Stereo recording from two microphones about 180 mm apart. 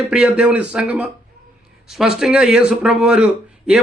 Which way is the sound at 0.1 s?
5° right (ahead or behind).